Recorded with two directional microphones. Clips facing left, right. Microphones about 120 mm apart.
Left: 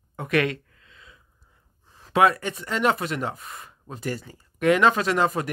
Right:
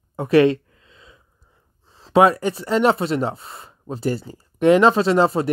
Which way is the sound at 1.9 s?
30° right (ahead or behind).